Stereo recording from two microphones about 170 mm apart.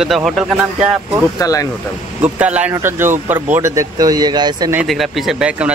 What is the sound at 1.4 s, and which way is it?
Speech, 20° left (ahead or behind).